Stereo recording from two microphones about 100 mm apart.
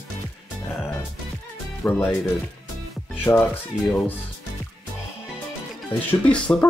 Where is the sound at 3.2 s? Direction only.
20° left (ahead or behind).